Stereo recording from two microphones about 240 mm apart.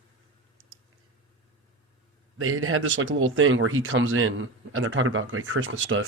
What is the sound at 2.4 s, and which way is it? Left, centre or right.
Speech, right.